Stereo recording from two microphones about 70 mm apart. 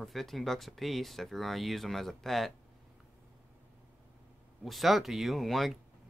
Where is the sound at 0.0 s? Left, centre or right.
Centre.